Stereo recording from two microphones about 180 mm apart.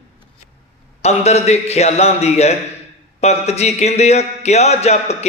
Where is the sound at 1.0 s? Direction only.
35° left (ahead or behind).